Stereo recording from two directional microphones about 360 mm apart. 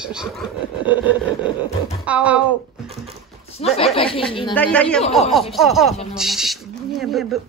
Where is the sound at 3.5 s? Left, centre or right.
Centre.